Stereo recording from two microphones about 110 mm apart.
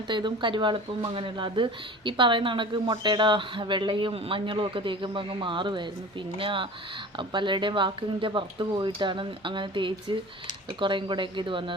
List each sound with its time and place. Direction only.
0.1 s speech: 45° right (ahead or behind)